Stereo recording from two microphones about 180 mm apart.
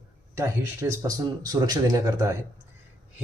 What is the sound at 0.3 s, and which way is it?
Speech, 15° right (ahead or behind).